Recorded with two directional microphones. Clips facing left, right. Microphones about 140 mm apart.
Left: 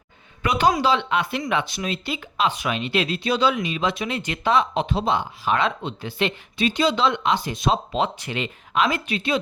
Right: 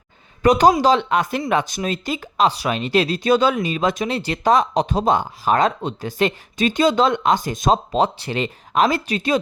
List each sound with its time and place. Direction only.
0.4 s speech: 40° right (ahead or behind)